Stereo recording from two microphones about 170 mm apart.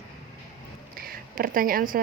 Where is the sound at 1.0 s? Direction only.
55° right (ahead or behind).